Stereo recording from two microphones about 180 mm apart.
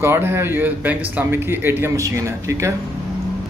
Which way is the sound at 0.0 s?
15° right (ahead or behind).